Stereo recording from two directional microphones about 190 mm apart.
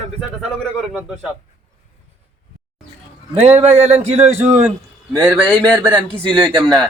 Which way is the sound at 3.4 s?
35° right (ahead or behind).